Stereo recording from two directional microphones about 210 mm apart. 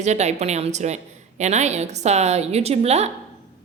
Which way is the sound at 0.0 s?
35° right (ahead or behind).